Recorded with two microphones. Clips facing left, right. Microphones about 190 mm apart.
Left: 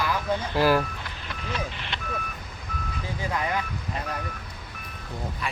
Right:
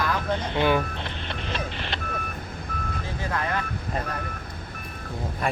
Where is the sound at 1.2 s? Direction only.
30° right (ahead or behind).